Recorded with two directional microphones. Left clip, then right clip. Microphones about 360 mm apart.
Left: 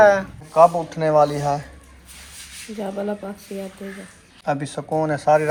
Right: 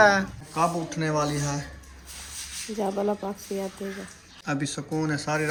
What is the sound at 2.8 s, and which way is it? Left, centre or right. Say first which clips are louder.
Speech: even; centre.